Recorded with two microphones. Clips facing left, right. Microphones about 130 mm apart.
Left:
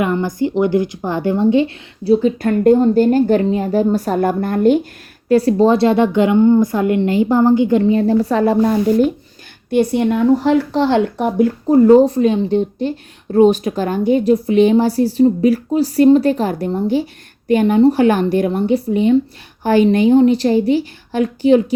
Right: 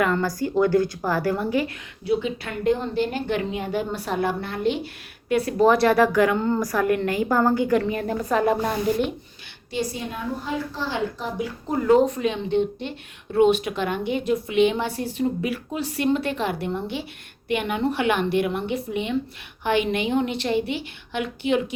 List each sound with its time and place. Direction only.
0.0 s a woman's voice: 20° left (ahead or behind); by 4.9 s 45° left (ahead or behind)
5.3 s a woman's voice: 30° left (ahead or behind)
9.6 s speech: 60° left (ahead or behind)
11.7 s a woman's voice: 35° left (ahead or behind)